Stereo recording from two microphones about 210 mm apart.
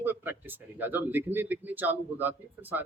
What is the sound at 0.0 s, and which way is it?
Speech, 10° right (ahead or behind).